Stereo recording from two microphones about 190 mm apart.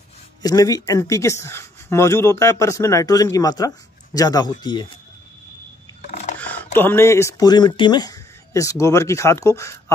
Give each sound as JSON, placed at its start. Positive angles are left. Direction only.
{"t": 0.4, "sound": "speech", "side_deg": 20}
{"t": 6.0, "sound": "a sound", "side_deg": 40}
{"t": 6.4, "sound": "speech", "side_deg": 10}